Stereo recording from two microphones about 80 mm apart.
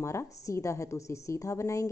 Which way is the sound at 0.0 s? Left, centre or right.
Left.